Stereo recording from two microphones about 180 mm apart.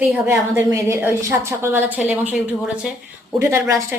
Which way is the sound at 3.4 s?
15° right (ahead or behind).